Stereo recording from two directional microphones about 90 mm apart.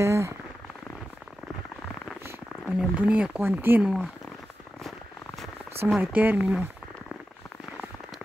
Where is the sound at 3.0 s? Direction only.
15° right (ahead or behind).